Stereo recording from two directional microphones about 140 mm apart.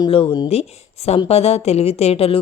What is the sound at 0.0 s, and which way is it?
A woman's voice, 35° left (ahead or behind).